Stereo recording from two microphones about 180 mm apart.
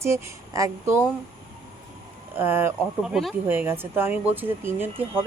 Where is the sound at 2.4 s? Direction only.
10° right (ahead or behind).